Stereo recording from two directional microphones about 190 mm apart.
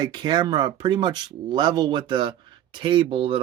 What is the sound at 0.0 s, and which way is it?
Speech, 20° right (ahead or behind).